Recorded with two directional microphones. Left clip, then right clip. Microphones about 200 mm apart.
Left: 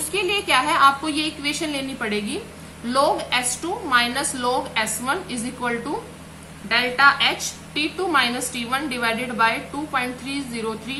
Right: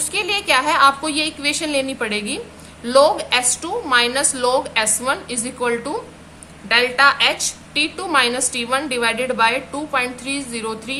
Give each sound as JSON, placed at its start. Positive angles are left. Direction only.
{"t": 0.1, "sound": "a woman's voice", "side_deg": -55}